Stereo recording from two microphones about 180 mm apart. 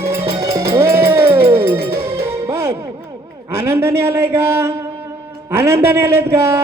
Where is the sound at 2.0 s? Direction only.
15° right (ahead or behind).